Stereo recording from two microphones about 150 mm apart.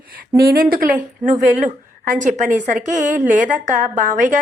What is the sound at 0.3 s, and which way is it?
A woman's voice, 85° right.